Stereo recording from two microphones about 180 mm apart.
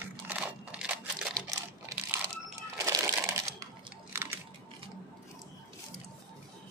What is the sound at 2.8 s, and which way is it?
Crumpling, 20° right (ahead or behind).